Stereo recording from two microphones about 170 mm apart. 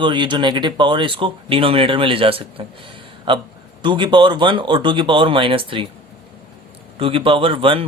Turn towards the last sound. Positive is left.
turn(degrees=-30)  # may be behind; listen again after turning